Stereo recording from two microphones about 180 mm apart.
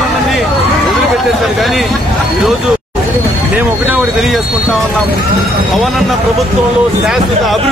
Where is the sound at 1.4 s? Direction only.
Centre (ahead or behind).